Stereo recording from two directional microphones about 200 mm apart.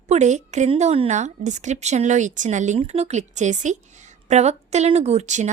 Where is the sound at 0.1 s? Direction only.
35° right (ahead or behind).